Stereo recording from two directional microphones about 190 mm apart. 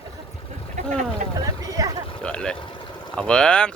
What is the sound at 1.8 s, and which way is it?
Speech, 20° right (ahead or behind).